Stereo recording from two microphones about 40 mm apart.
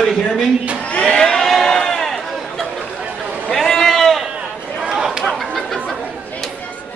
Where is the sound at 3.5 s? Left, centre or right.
Centre.